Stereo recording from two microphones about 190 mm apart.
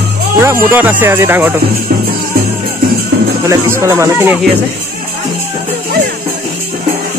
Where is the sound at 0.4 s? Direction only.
15° right (ahead or behind).